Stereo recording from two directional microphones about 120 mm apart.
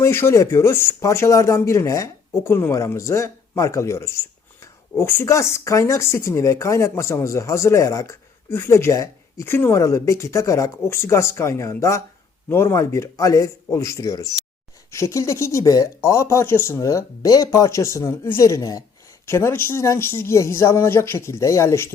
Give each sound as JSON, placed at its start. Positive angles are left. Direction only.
{"t": 0.0, "sound": "speech", "side_deg": 20}